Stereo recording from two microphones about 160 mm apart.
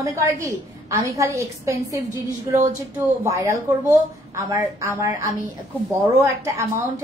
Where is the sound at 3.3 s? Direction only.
20° right (ahead or behind).